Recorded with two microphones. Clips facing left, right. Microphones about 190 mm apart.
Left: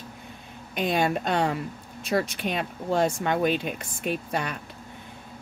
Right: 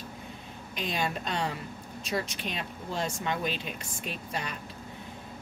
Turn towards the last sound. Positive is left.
turn(degrees=55)  # may be behind; listen again after turning